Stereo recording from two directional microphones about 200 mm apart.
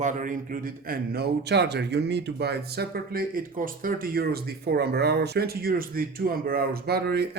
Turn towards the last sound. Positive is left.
turn(degrees=-55)  # may be behind; listen again after turning